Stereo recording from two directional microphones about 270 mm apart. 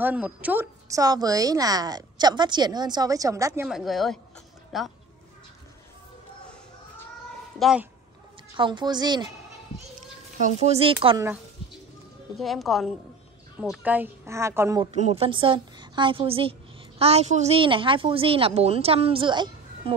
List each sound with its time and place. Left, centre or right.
0.0 s a woman's voice: centre
7.5 s speech: centre
8.5 s a woman's voice: centre
10.6 s a woman's voice: right
12.4 s a woman's voice: centre
14.9 s a woman's voice: right